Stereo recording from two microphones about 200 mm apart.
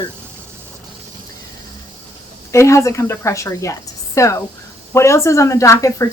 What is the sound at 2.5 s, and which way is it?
A woman's voice, 15° left (ahead or behind).